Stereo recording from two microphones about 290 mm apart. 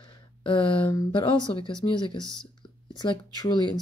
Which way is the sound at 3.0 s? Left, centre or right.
Centre.